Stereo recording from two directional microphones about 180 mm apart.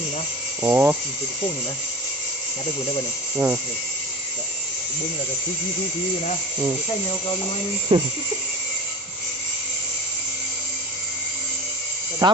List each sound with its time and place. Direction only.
0.6 s speech: 10° right (ahead or behind)
3.3 s speech: 10° right (ahead or behind)
7.9 s speech: 25° right (ahead or behind)
12.2 s speech: 25° right (ahead or behind)